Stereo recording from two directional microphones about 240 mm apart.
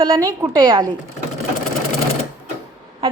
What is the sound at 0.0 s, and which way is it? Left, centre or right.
Speech, centre.